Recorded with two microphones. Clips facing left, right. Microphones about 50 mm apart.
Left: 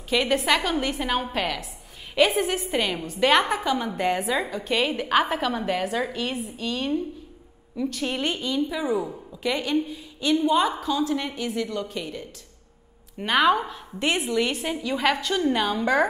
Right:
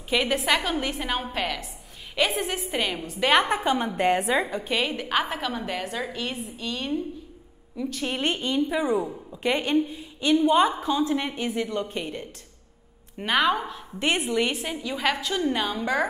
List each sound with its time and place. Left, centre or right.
0.1 s a woman's voice: centre
3.5 s a woman's voice: right
4.6 s a woman's voice: centre
8.2 s a woman's voice: right
13.2 s a woman's voice: centre
13.9 s a woman's voice: centre
14.5 s a woman's voice: centre